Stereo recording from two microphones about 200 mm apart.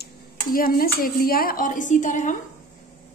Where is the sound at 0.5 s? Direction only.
45° left (ahead or behind).